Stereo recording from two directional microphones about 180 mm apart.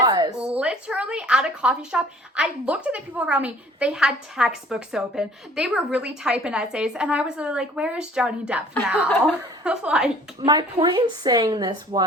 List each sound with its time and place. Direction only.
0.0 s a sound: 20° right (ahead or behind)
0.5 s a woman's voice: 5° right (ahead or behind)
10.4 s speech: 25° right (ahead or behind)